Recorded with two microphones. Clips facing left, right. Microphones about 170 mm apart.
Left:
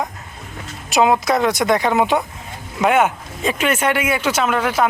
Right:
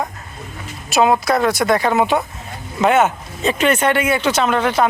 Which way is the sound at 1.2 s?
20° left (ahead or behind).